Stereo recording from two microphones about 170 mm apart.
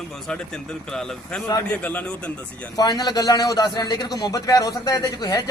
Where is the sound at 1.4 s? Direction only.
15° left (ahead or behind).